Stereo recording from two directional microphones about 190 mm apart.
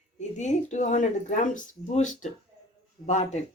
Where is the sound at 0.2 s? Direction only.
40° left (ahead or behind).